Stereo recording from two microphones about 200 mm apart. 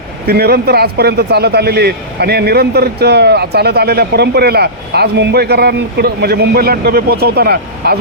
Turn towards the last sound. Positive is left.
turn(degrees=-50)  # may be behind; listen again after turning